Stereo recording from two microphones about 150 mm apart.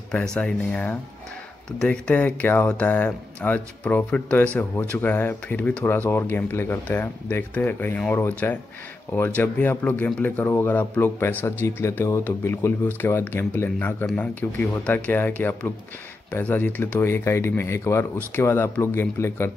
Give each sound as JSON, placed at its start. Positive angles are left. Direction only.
{"t": 0.1, "sound": "speech", "side_deg": 5}